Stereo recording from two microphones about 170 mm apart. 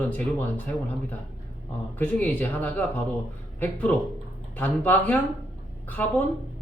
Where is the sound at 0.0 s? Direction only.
10° left (ahead or behind).